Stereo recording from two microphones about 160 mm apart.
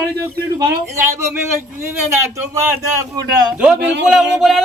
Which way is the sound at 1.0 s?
15° right (ahead or behind).